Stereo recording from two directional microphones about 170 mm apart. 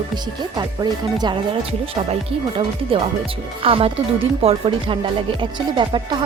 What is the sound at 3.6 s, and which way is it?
Speech, 35° right (ahead or behind).